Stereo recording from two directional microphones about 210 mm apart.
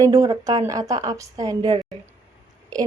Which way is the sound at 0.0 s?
15° right (ahead or behind).